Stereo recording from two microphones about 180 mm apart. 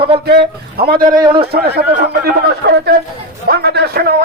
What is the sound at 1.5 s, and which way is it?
Speech, 60° right (ahead or behind).